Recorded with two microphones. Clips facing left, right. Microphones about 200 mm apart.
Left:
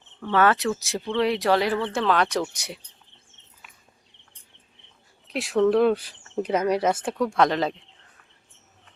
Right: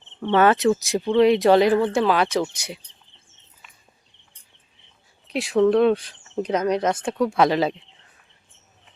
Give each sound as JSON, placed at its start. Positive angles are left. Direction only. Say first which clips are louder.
{"t": 0.2, "sound": "speech", "louder": "right 4 dB", "side_deg": -20}
{"t": 3.6, "sound": "walk", "louder": "even", "side_deg": 5}
{"t": 5.3, "sound": "speech", "louder": "right 2 dB", "side_deg": 0}